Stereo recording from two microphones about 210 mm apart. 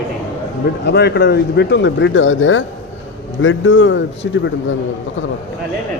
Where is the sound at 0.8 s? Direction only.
50° left (ahead or behind).